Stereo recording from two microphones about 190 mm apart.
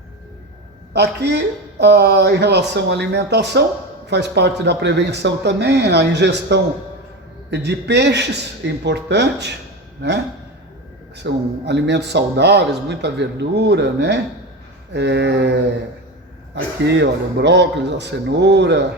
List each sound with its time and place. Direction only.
0.9 s a man's voice: 60° right (ahead or behind)
11.2 s a man's voice: 65° right (ahead or behind)
16.6 s a man's voice: 65° right (ahead or behind)